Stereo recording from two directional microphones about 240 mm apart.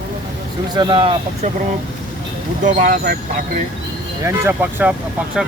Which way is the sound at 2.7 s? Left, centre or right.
Right.